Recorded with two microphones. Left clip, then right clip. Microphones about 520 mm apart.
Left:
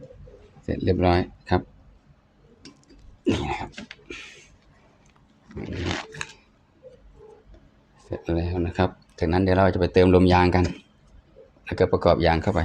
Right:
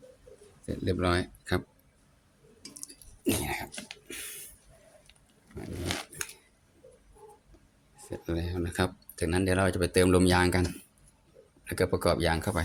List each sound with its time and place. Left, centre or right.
0.6 s speech: right
3.2 s throat clearing: right
5.8 s a sound: right
8.1 s speech: right